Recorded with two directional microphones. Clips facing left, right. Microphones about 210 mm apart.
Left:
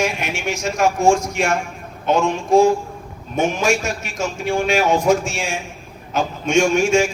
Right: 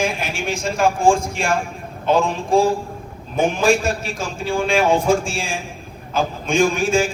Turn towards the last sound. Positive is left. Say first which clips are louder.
# left 2 dB
turn(degrees=-35)  # may be behind; listen again after turning